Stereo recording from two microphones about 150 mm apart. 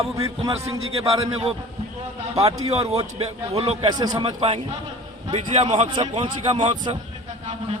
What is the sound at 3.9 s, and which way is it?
A man's voice, 25° right (ahead or behind).